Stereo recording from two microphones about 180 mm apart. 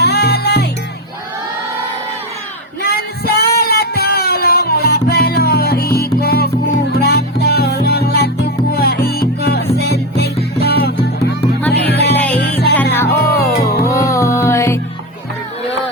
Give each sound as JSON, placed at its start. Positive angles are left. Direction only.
{"t": 0.0, "sound": "music", "side_deg": 60}
{"t": 2.8, "sound": "music", "side_deg": 55}
{"t": 12.1, "sound": "music", "side_deg": 10}
{"t": 12.4, "sound": "music", "side_deg": 65}
{"t": 12.7, "sound": "music", "side_deg": 10}
{"t": 13.2, "sound": "music", "side_deg": 55}
{"t": 14.1, "sound": "music", "side_deg": 15}